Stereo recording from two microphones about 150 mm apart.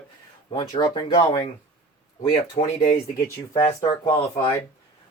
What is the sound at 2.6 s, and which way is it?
Speech, 35° left (ahead or behind).